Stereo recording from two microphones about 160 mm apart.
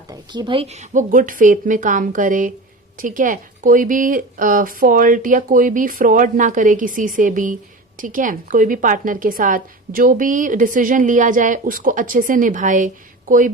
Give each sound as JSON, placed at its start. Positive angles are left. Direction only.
{"t": 0.1, "sound": "a woman's voice", "side_deg": -30}